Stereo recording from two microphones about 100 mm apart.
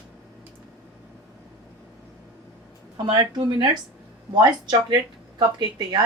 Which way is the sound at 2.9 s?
45° right (ahead or behind).